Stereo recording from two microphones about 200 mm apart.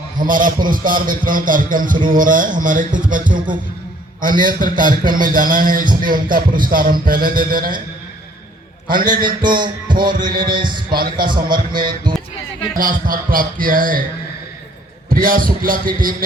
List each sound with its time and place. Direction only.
0.2 s speech: 40° right (ahead or behind)
2.0 s music: 40° right (ahead or behind)
3.3 s music: 25° right (ahead or behind)
4.2 s speech: 45° right (ahead or behind)
8.9 s speech: 45° right (ahead or behind)
9.2 s music: 25° right (ahead or behind)
12.7 s speech: 45° right (ahead or behind)
15.1 s speech: 45° right (ahead or behind)